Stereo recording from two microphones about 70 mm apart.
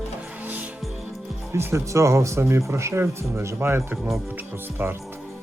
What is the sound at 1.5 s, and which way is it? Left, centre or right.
Speech, right.